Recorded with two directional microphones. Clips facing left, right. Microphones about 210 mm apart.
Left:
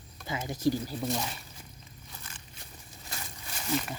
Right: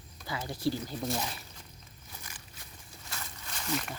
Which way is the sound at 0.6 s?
5° left (ahead or behind).